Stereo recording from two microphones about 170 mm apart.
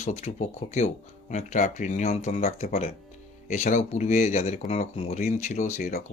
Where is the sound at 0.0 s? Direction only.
40° left (ahead or behind).